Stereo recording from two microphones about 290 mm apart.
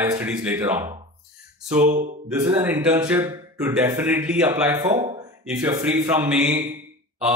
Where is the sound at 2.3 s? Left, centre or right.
Centre.